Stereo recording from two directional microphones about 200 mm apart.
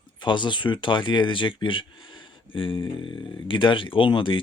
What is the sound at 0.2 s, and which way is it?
Speech, 25° left (ahead or behind).